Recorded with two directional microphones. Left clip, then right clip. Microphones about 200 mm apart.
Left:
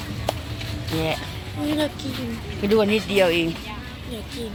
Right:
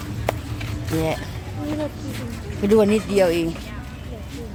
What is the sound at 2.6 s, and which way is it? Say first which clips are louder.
Speech: right 2 dB; 25° right (ahead or behind).